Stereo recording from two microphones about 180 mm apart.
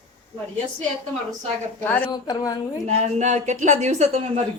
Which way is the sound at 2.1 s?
20° left (ahead or behind).